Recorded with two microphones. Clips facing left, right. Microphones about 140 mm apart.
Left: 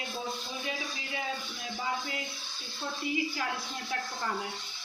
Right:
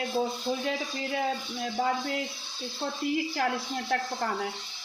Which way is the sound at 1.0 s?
55° right (ahead or behind).